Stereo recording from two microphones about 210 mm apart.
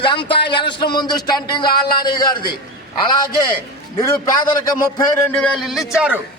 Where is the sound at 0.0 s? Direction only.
20° left (ahead or behind).